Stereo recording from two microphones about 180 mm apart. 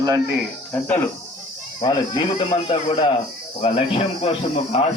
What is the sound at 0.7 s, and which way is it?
Speech, 10° left (ahead or behind).